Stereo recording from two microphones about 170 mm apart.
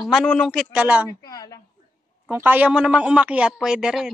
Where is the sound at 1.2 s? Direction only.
20° left (ahead or behind).